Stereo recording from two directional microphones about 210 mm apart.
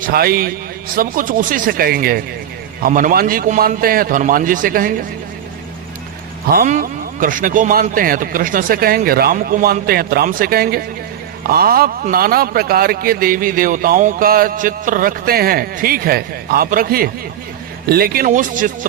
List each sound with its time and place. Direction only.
0.0 s a man's voice: 45° right (ahead or behind)
6.5 s a man's voice: 40° right (ahead or behind)